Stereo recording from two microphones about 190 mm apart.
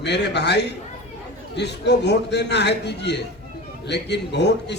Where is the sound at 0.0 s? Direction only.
65° left (ahead or behind).